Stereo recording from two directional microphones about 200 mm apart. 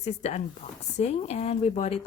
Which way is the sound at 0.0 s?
35° left (ahead or behind).